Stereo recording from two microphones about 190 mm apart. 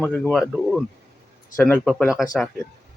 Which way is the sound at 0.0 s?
5° left (ahead or behind).